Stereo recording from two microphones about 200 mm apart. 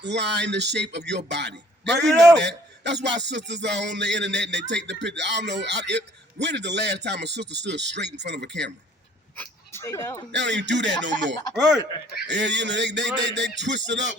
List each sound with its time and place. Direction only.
0.0 s speech: 60° right (ahead or behind)
2.0 s a man's voice: centre (ahead or behind)
2.4 s speech: 60° right (ahead or behind)
9.4 s speech: 15° left (ahead or behind)
10.3 s speech: 60° right (ahead or behind)